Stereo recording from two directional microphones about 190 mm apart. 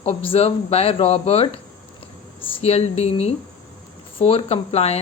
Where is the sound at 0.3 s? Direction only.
30° left (ahead or behind).